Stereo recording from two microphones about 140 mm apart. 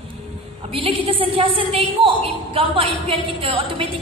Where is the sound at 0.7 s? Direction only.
40° right (ahead or behind).